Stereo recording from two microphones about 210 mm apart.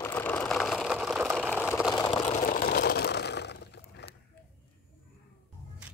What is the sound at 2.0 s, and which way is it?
Vehicle, 20° left (ahead or behind).